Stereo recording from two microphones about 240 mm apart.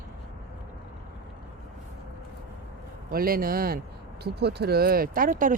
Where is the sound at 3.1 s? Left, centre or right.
Right.